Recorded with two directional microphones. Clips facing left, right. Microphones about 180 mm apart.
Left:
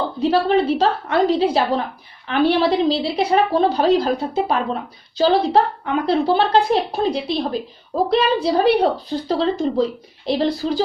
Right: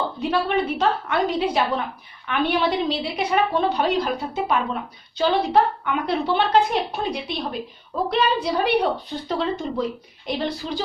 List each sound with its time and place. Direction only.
0.2 s a woman's voice: 30° left (ahead or behind)